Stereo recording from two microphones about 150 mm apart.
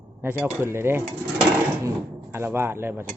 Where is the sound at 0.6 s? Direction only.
15° right (ahead or behind).